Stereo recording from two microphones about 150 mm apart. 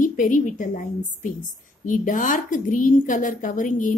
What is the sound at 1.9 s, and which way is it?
A woman's voice, 60° left (ahead or behind).